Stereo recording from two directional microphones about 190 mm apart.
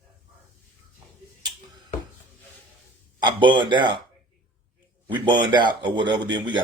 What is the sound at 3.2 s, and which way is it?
Speech, 25° right (ahead or behind).